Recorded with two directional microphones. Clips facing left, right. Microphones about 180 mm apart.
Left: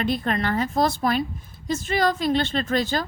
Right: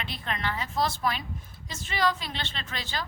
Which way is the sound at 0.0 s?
45° left (ahead or behind).